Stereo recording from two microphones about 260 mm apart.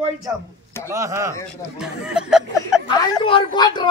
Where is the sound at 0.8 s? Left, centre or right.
Centre.